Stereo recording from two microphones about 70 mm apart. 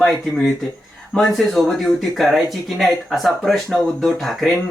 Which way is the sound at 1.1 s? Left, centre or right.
Centre.